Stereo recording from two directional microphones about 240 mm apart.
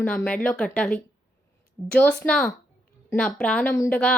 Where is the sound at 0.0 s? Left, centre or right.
Centre.